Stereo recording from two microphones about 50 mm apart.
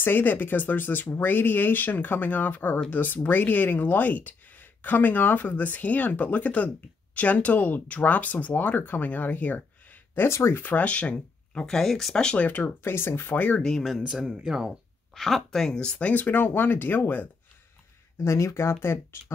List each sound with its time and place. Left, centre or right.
0.0 s speech: left
10.2 s speech: left
10.5 s speech: left
11.6 s speech: centre
12.4 s speech: left
12.9 s speech: left
13.6 s speech: centre
14.3 s speech: centre
15.1 s speech: centre
16.0 s speech: left
18.2 s speech: left